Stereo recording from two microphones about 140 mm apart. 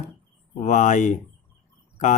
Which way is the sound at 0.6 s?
60° left (ahead or behind).